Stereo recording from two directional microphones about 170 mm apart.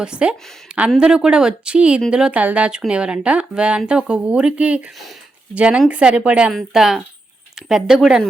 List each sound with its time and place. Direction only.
0.0 s a woman's voice: 5° right (ahead or behind)